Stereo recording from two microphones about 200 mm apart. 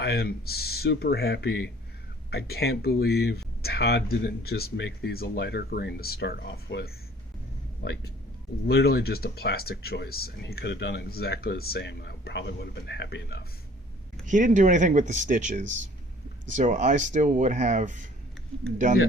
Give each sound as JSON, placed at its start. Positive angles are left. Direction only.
{"t": 0.0, "sound": "speech", "side_deg": 50}
{"t": 14.3, "sound": "speech", "side_deg": -40}